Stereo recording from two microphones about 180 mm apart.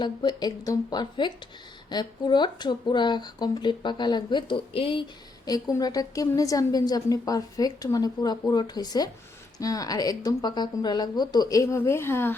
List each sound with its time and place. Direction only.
0.0 s a woman's voice: 25° left (ahead or behind)